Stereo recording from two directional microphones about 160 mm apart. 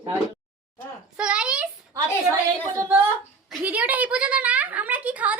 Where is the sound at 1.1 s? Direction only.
5° right (ahead or behind).